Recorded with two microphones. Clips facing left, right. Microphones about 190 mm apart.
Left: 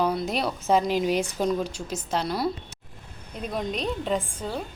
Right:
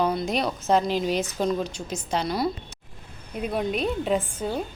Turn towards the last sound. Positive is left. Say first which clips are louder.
# right 3 dB
turn(degrees=-5)  # may be behind; listen again after turning